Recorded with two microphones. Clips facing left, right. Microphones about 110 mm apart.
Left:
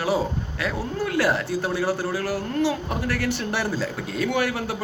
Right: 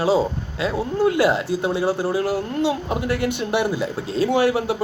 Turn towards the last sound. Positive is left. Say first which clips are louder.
# right 6 dB
turn(degrees=-25)  # may be behind; listen again after turning